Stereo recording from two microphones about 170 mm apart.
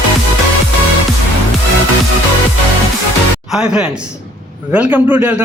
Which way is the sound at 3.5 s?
5° right (ahead or behind).